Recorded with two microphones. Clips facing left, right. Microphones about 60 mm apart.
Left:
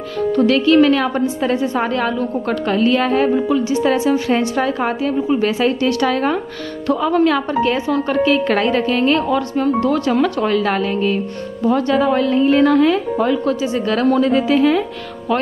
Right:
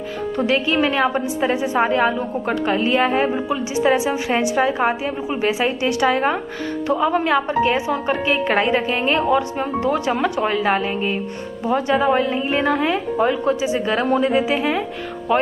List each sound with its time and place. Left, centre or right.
0.5 s a woman's voice: centre